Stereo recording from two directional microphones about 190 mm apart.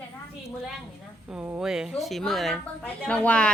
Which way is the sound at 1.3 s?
5° right (ahead or behind).